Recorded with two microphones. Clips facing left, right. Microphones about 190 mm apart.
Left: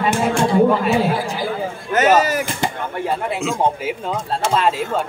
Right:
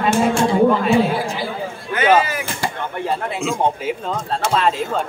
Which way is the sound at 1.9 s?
45° left (ahead or behind).